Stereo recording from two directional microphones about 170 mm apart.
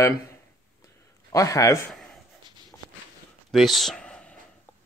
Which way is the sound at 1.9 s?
Centre (ahead or behind).